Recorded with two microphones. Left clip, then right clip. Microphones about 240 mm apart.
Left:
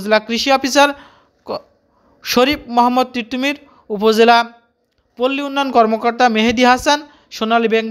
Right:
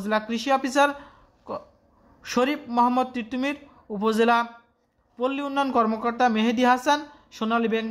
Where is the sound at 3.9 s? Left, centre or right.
Left.